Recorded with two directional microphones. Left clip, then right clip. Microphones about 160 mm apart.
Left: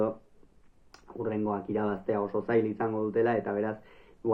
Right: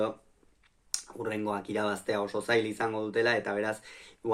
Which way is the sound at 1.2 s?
20° right (ahead or behind).